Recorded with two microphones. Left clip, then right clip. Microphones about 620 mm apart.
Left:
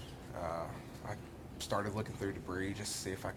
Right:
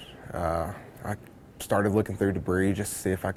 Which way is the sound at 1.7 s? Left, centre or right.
Right.